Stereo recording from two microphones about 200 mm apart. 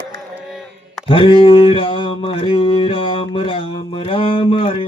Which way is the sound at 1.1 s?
25° left (ahead or behind).